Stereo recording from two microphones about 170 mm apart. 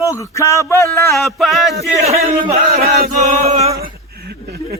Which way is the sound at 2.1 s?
40° right (ahead or behind).